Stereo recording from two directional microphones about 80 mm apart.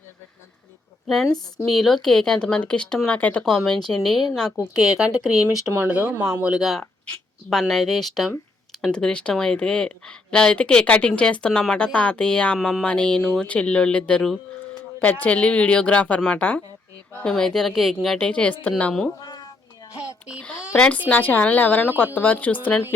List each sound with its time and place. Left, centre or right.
1.0 s speech: centre
3.4 s speech: centre
5.9 s speech: centre
6.4 s speech: centre
12.5 s speech: centre
12.8 s speech: centre
18.3 s speech: centre
20.0 s a sound: centre
20.7 s a woman's voice: centre